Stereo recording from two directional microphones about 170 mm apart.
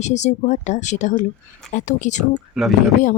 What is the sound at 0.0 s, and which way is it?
Speech, 45° left (ahead or behind).